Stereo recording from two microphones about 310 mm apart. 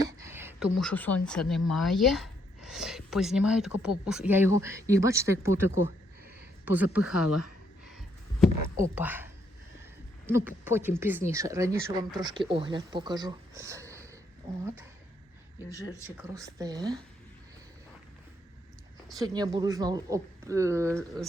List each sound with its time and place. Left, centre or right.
0.0 s a sound: centre
0.8 s a woman's voice: centre
6.9 s speech: centre
7.3 s speech: left
8.7 s speech: centre
16.2 s speech: centre
19.1 s speech: centre